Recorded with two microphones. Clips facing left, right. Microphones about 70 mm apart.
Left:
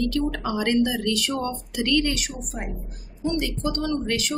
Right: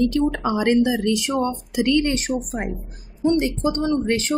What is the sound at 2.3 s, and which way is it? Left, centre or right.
A woman's voice, right.